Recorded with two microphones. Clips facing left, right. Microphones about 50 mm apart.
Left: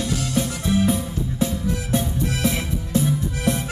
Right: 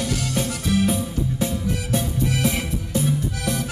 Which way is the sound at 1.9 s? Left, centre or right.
Left.